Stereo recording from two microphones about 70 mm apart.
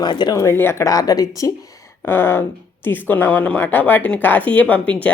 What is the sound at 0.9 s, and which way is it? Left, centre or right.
Speech, left.